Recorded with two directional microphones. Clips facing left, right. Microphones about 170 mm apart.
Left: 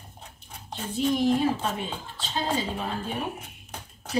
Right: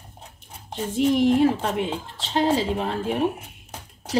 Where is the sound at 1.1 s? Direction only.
80° right.